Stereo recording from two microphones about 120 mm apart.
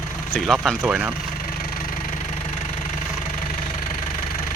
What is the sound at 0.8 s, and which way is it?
Speech, 10° right (ahead or behind).